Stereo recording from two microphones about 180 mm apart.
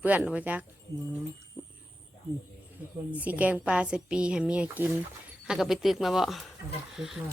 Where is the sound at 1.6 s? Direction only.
10° right (ahead or behind).